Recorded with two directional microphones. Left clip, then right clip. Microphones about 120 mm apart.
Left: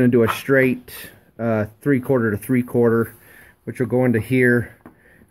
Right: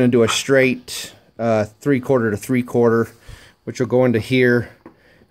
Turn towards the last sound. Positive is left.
turn(degrees=-15)  # may be behind; listen again after turning